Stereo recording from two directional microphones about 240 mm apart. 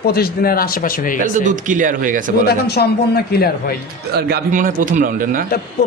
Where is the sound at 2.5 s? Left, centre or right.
Left.